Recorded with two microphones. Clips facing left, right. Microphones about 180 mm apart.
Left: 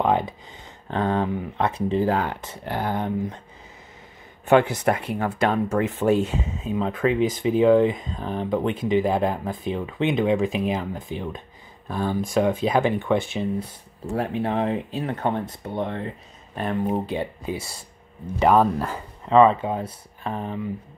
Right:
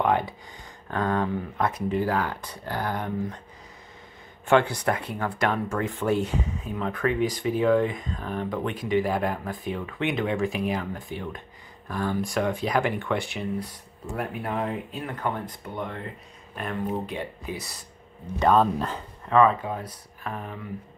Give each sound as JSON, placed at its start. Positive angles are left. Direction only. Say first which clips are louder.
{"t": 0.0, "sound": "a sound", "louder": "left 2 dB", "side_deg": 20}
{"t": 0.8, "sound": "speech", "louder": "left 3 dB", "side_deg": 20}
{"t": 4.5, "sound": "speech", "louder": "left 3 dB", "side_deg": 15}
{"t": 18.4, "sound": "speech", "louder": "left 3 dB", "side_deg": 10}
{"t": 19.2, "sound": "speech", "louder": "left 4 dB", "side_deg": 25}